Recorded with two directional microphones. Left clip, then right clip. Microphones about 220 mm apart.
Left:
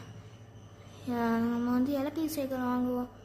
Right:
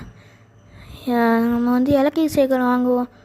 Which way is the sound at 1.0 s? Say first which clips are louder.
Right 13 dB; 35° right (ahead or behind).